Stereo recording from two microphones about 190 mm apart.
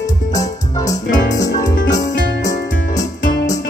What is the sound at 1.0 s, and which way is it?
Music, 60° left (ahead or behind).